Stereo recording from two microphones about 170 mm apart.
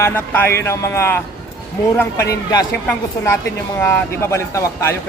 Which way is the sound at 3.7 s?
15° left (ahead or behind).